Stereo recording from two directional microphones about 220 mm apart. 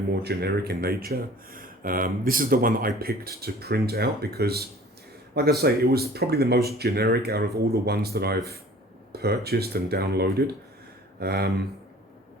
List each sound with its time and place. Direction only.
0.2 s speech: 45° right (ahead or behind)